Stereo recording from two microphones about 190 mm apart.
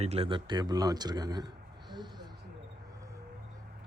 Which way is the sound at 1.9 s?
25° right (ahead or behind).